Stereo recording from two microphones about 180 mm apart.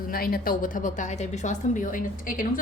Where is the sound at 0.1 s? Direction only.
55° left (ahead or behind).